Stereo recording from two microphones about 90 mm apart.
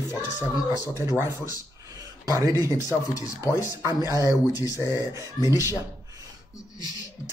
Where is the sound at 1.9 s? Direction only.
40° right (ahead or behind).